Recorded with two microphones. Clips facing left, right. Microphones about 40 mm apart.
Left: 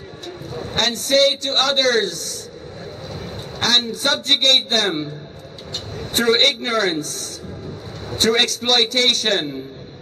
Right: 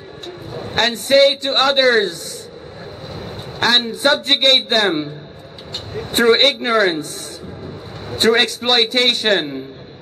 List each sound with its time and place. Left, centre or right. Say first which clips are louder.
0.5 s a sound: right 3 dB; centre
0.8 s a man's voice: right 4 dB; right
3.5 s a man's voice: right 3 dB; right